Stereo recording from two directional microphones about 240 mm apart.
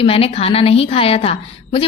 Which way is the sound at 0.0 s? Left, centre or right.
Left.